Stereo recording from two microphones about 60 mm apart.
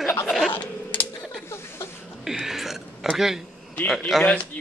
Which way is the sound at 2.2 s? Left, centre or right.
Centre.